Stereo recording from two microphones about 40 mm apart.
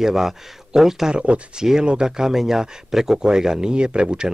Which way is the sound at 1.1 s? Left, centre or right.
Right.